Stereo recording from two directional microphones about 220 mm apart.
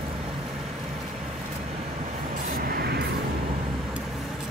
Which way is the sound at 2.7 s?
45° right (ahead or behind).